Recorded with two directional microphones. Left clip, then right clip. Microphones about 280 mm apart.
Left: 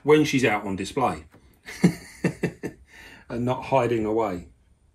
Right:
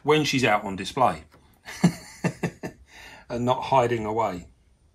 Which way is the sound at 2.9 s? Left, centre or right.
Right.